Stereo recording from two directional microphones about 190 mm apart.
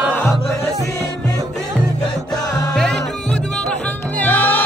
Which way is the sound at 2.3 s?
20° left (ahead or behind).